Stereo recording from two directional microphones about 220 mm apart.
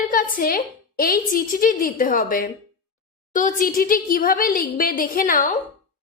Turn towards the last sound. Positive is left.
turn(degrees=35)  # may be behind; listen again after turning